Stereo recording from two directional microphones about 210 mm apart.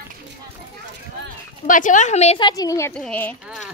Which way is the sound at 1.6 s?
40° left (ahead or behind).